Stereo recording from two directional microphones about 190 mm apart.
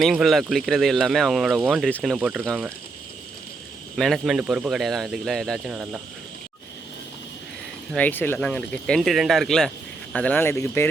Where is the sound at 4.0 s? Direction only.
Centre (ahead or behind).